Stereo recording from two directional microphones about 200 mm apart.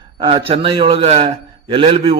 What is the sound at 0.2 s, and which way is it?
A man's voice, 25° right (ahead or behind).